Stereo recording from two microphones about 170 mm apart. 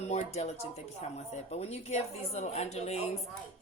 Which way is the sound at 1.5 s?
40° left (ahead or behind).